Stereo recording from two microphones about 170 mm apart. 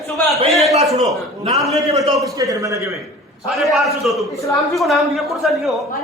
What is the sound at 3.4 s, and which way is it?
A man's voice, centre (ahead or behind).